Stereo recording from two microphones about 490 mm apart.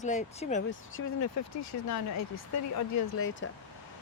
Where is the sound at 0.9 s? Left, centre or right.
Left.